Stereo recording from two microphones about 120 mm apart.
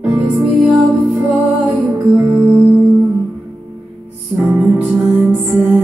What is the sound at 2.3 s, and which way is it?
Music, 45° right (ahead or behind).